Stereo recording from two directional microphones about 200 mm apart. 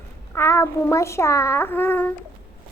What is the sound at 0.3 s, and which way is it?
A child's voice, 10° left (ahead or behind).